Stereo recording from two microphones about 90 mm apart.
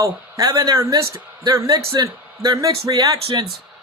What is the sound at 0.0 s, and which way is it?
Speech, 40° right (ahead or behind).